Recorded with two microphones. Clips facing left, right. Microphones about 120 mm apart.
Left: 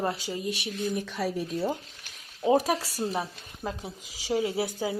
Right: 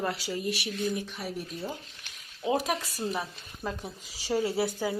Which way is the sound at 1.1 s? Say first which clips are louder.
Left 6 dB; 90° left.